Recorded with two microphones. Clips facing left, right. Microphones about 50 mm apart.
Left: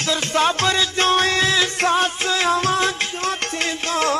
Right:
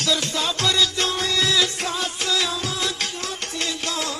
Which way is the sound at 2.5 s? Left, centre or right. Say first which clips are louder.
Left 8 dB; left.